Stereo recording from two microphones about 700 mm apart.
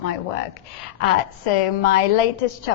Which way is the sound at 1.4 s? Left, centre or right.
Left.